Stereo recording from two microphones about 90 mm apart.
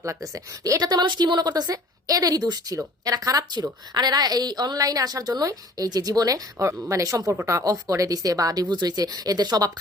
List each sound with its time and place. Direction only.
0.0 s a woman's voice: 35° right (ahead or behind)